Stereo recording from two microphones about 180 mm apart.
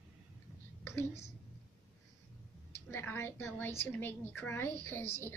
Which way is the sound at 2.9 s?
15° left (ahead or behind).